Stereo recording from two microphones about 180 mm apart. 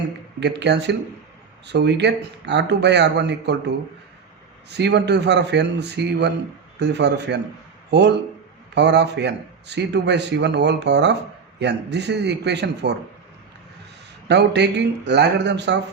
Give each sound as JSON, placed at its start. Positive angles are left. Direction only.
{"t": 0.3, "sound": "a man's voice", "side_deg": -70}
{"t": 14.3, "sound": "a man's voice", "side_deg": -70}